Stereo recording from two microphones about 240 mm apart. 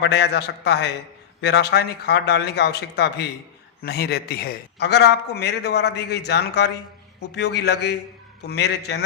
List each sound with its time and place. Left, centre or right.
0.0 s a man's voice: left